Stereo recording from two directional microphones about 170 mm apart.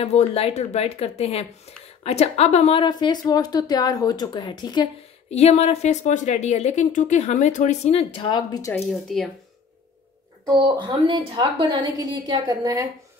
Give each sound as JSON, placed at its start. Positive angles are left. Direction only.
{"t": 0.0, "sound": "speech", "side_deg": 35}
{"t": 5.3, "sound": "speech", "side_deg": 40}
{"t": 8.7, "sound": "speech", "side_deg": 0}
{"t": 10.4, "sound": "a woman's voice", "side_deg": -25}